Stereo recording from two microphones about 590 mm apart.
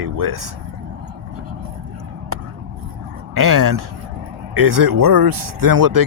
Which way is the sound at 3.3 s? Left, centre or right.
Right.